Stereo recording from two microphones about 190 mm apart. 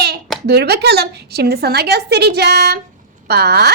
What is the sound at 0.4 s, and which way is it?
Speech, 60° right (ahead or behind).